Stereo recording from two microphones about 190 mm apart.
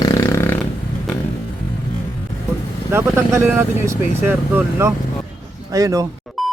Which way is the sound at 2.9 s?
10° right (ahead or behind).